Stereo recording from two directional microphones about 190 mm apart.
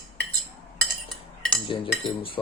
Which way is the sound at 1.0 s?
5° left (ahead or behind).